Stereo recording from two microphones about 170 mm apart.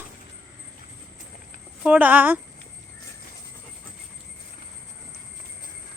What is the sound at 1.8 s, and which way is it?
Speech, 10° right (ahead or behind).